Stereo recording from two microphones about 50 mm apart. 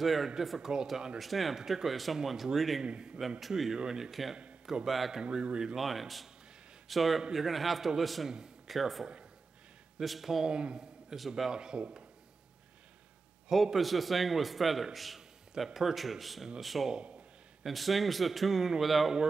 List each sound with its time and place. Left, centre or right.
0.0 s a man's voice: centre
1.6 s speech: centre
1.9 s a man's voice: centre
2.8 s a man's voice: centre
3.2 s a man's voice: centre
4.1 s a man's voice: centre
5.2 s a man's voice: centre
5.8 s a man's voice: centre
10.5 s a man's voice: centre
11.1 s a man's voice: centre
13.5 s a man's voice: centre